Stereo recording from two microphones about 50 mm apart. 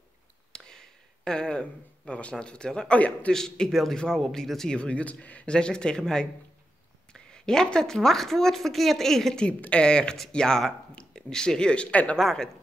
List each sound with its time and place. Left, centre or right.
0.5 s a sound: centre
2.3 s speech: centre
4.7 s speech: left
5.5 s speech: centre
12.2 s a woman's voice: centre